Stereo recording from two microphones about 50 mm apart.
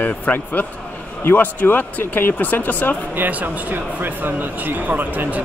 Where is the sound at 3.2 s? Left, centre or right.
Right.